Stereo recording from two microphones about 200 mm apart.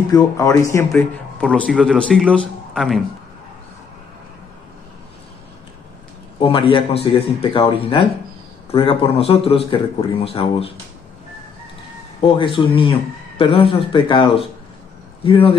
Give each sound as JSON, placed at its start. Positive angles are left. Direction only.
{"t": 0.1, "sound": "speech", "side_deg": 15}
{"t": 6.4, "sound": "a man's voice", "side_deg": 25}
{"t": 12.2, "sound": "a man's voice", "side_deg": 25}